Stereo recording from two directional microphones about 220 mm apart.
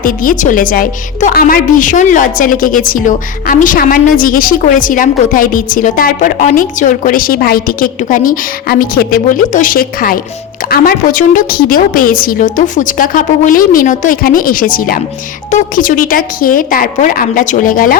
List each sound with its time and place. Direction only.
0.0 s speech: 40° left (ahead or behind)